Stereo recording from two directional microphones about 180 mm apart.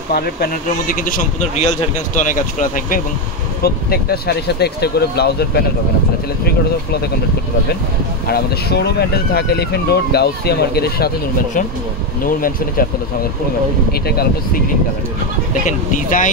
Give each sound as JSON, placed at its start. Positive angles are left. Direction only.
{"t": 0.1, "sound": "speech", "side_deg": 55}
{"t": 3.6, "sound": "speech", "side_deg": 60}
{"t": 8.3, "sound": "speech", "side_deg": 65}
{"t": 12.3, "sound": "speech", "side_deg": 50}
{"t": 15.6, "sound": "speech", "side_deg": 45}